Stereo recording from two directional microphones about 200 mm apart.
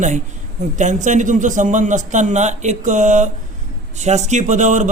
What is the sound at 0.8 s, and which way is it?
A man's voice, 35° right (ahead or behind).